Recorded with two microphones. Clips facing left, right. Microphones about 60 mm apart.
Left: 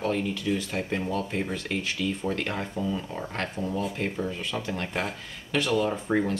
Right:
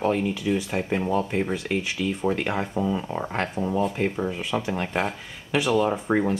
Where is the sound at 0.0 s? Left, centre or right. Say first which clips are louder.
Right 4 dB; centre.